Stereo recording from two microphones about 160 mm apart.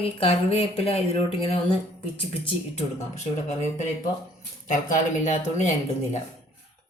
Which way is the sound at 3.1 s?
45° left (ahead or behind).